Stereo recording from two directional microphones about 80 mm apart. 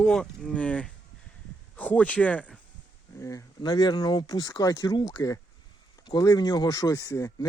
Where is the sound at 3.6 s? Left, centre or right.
Left.